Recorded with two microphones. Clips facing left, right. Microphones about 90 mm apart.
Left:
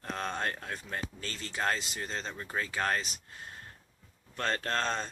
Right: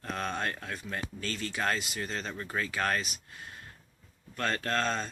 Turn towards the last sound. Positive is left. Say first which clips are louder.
# right 2 dB
turn(degrees=30)  # may be behind; listen again after turning